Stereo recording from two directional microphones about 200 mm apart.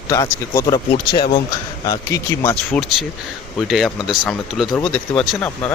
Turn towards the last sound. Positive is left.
turn(degrees=5)  # may be behind; listen again after turning